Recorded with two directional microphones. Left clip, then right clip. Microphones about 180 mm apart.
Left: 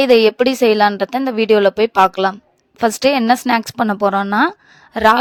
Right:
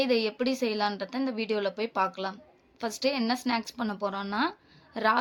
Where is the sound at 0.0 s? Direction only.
60° left (ahead or behind).